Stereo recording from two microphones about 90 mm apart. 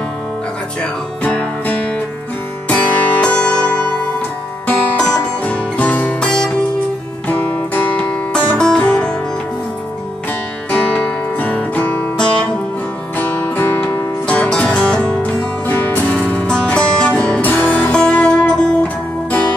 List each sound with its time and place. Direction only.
1.2 s music: 10° left (ahead or behind)
7.2 s music: 20° left (ahead or behind)
10.7 s music: 15° left (ahead or behind)
14.2 s music: 10° left (ahead or behind)